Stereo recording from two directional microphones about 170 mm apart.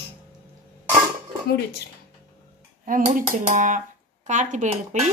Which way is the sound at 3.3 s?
50° right (ahead or behind).